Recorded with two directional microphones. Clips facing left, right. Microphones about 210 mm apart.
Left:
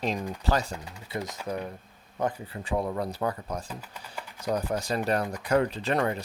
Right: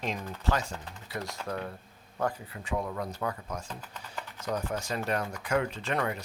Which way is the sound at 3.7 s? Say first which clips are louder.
Left 2 dB; 10° left (ahead or behind).